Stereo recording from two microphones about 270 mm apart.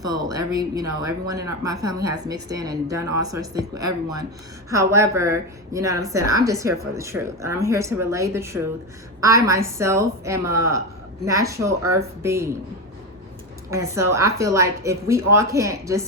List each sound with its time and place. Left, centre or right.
0.0 s a woman's voice: centre
13.7 s a woman's voice: centre